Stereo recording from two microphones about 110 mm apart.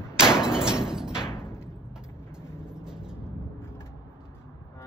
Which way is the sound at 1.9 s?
5° right (ahead or behind).